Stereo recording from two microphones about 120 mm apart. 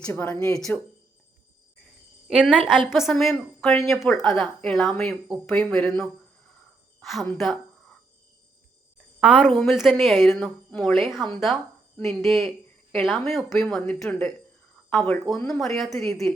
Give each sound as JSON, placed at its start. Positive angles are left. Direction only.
{"t": 0.1, "sound": "speech", "side_deg": 20}
{"t": 2.5, "sound": "a woman's voice", "side_deg": -5}
{"t": 9.2, "sound": "a woman's voice", "side_deg": -10}
{"t": 9.5, "sound": "speech", "side_deg": 0}
{"t": 12.0, "sound": "speech", "side_deg": 0}